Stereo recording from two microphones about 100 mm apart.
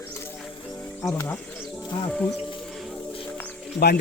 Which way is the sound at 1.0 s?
25° left (ahead or behind).